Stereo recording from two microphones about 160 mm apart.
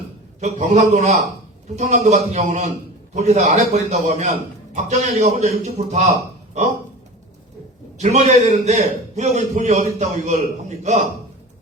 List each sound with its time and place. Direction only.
0.3 s a man's voice: 45° right (ahead or behind)
7.9 s a man's voice: 45° right (ahead or behind)